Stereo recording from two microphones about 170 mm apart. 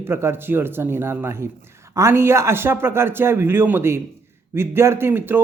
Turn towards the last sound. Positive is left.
turn(degrees=-15)  # may be behind; listen again after turning